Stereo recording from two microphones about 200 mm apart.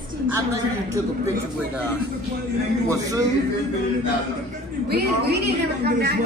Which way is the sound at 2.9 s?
15° right (ahead or behind).